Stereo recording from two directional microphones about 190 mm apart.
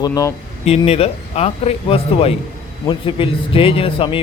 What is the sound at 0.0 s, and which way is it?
Speech, 20° left (ahead or behind).